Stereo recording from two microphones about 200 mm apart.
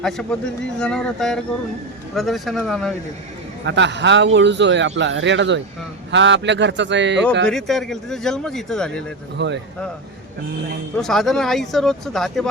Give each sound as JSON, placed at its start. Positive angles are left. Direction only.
{"t": 0.0, "sound": "speech", "side_deg": 5}
{"t": 3.7, "sound": "a man's voice", "side_deg": -60}
{"t": 7.4, "sound": "speech", "side_deg": 0}
{"t": 9.4, "sound": "a man's voice", "side_deg": -60}
{"t": 10.9, "sound": "speech", "side_deg": 0}